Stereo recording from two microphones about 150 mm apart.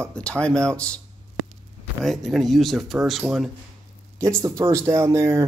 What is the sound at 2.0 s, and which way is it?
Speech, centre (ahead or behind).